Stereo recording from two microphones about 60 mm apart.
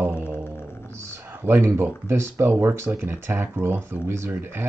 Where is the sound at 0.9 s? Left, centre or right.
Right.